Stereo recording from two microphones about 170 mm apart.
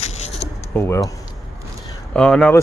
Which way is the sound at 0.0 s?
40° left (ahead or behind).